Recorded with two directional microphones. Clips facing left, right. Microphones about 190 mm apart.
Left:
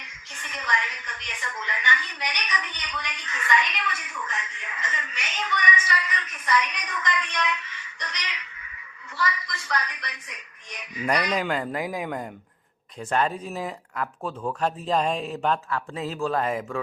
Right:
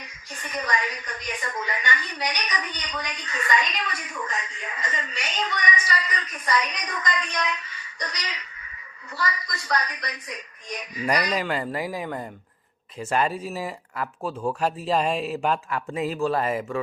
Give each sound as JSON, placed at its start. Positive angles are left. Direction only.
{"t": 0.0, "sound": "a woman's voice", "side_deg": -35}
{"t": 11.3, "sound": "speech", "side_deg": -5}